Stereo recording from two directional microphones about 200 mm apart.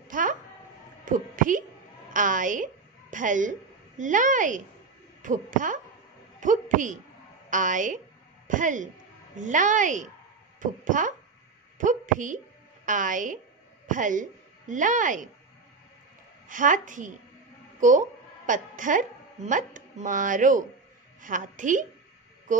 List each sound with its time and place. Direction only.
0.1 s a child's voice: 40° right (ahead or behind)
16.4 s a woman's voice: 40° right (ahead or behind)
22.5 s mantra: 40° right (ahead or behind)